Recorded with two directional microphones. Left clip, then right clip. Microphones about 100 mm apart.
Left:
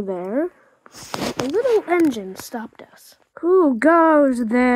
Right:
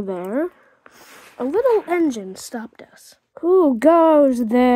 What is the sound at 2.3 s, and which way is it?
Speech, 15° right (ahead or behind).